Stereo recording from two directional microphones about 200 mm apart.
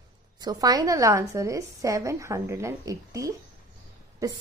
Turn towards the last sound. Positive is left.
turn(degrees=-15)  # may be behind; listen again after turning